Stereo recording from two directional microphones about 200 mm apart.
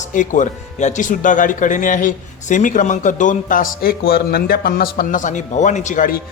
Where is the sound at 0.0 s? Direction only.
40° left (ahead or behind).